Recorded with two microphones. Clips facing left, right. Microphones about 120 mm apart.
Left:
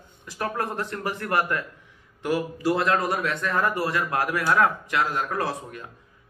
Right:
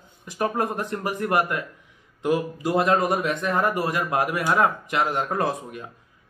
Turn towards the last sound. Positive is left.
turn(degrees=-20)  # may be behind; listen again after turning